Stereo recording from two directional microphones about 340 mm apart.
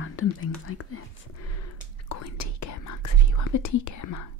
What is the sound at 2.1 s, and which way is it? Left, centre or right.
Whispering, left.